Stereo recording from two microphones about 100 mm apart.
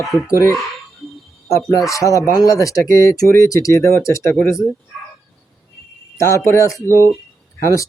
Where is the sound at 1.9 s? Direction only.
35° left (ahead or behind).